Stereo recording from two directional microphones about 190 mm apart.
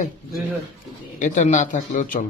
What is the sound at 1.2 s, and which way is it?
Speech, 40° left (ahead or behind).